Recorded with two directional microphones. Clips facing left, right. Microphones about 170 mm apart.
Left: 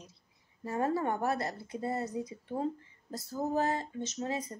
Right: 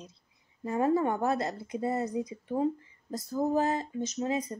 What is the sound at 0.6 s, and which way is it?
Speech, 20° right (ahead or behind).